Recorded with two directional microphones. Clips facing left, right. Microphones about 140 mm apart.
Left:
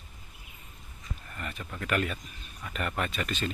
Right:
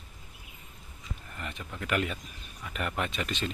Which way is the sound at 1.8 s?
15° right (ahead or behind).